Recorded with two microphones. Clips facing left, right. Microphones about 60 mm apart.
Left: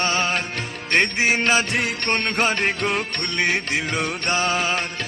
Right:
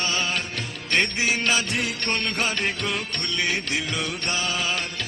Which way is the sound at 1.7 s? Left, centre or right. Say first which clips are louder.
Left 3 dB; left.